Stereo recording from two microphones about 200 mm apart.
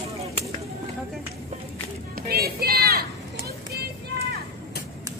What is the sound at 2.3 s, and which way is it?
Vehicle, 50° right (ahead or behind).